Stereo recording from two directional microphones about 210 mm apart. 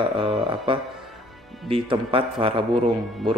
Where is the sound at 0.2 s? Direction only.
25° right (ahead or behind).